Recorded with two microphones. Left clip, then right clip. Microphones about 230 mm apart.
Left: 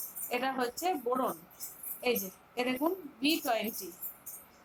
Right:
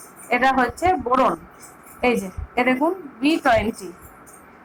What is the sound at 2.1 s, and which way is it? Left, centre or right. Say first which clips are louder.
Speech: right 8 dB; right.